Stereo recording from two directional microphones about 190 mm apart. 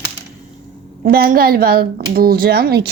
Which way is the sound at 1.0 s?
50° right (ahead or behind).